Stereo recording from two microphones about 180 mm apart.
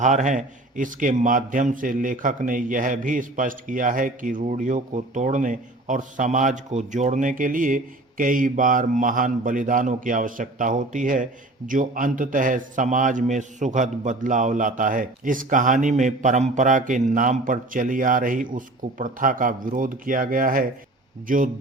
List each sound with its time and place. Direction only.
0.0 s speech: 45° right (ahead or behind)